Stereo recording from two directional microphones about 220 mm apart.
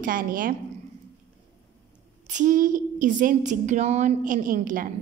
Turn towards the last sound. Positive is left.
turn(degrees=-40)  # may be behind; listen again after turning